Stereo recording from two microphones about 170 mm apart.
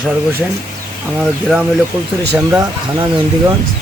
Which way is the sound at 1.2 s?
Centre (ahead or behind).